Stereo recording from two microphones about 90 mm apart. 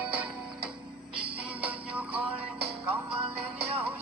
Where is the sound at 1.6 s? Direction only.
20° right (ahead or behind).